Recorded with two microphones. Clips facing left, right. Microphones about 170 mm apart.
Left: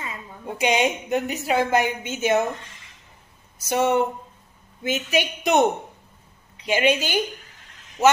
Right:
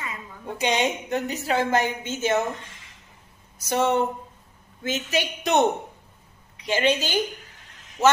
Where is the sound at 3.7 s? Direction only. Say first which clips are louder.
Left 2 dB; 15° left (ahead or behind).